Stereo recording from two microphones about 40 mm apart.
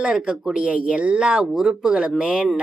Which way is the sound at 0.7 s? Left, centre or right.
Right.